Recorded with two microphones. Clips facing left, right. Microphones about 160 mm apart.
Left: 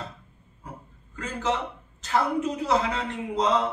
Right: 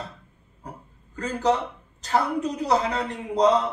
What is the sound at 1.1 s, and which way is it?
A man's voice, 40° right (ahead or behind).